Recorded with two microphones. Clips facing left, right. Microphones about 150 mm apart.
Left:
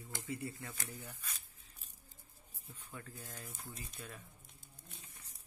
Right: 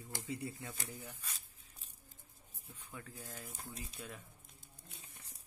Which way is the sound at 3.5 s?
35° right (ahead or behind).